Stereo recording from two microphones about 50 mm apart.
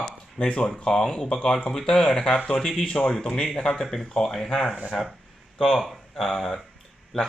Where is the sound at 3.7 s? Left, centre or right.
Centre.